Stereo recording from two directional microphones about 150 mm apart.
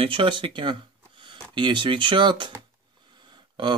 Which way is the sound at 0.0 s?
35° right (ahead or behind).